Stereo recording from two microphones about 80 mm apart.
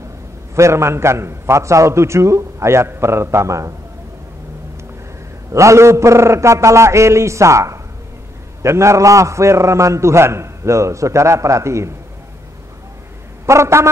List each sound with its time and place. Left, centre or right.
0.6 s a man's voice: right
5.5 s a man's voice: right
13.5 s a man's voice: right